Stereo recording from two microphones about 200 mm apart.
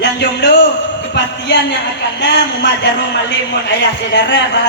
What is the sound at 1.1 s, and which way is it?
A woman's voice, 60° left (ahead or behind).